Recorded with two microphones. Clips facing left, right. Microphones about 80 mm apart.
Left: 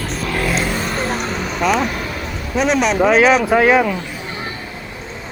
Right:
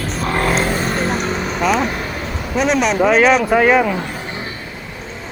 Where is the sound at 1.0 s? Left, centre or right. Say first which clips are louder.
Right 2 dB; centre.